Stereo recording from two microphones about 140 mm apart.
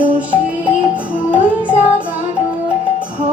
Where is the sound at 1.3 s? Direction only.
10° right (ahead or behind).